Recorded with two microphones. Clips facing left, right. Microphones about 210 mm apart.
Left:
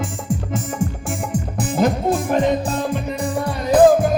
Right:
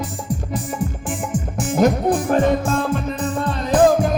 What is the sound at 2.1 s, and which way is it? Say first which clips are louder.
Music: right 1 dB; 20° left (ahead or behind).